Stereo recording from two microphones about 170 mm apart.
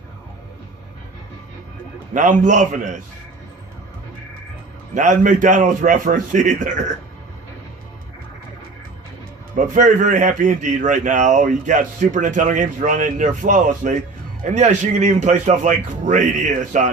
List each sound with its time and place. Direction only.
2.1 s speech: 50° right (ahead or behind)
4.9 s speech: 45° right (ahead or behind)
9.6 s speech: 50° right (ahead or behind)